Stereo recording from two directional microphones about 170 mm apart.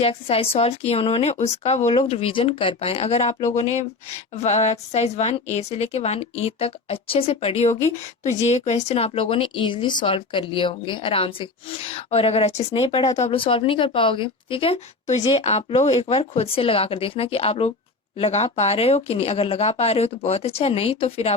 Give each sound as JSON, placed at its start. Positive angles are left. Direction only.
{"t": 0.0, "sound": "a woman's voice", "side_deg": 35}